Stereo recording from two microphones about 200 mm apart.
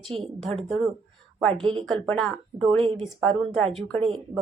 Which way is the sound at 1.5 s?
25° right (ahead or behind).